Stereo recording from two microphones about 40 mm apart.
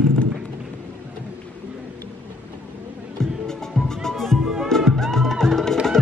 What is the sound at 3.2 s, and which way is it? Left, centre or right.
Music, centre.